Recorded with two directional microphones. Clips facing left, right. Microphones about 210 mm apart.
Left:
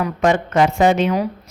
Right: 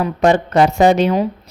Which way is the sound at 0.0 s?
30° right (ahead or behind).